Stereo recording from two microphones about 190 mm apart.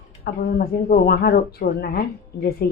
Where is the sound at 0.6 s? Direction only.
55° left (ahead or behind).